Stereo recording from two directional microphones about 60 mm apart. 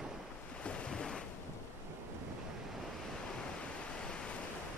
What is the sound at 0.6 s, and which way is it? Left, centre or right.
Waves, centre.